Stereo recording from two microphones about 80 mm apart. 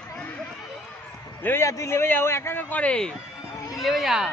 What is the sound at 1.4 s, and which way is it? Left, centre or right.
Speech, left.